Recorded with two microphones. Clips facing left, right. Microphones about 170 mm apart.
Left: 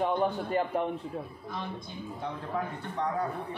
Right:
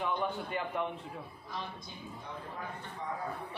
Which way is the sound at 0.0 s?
40° left (ahead or behind).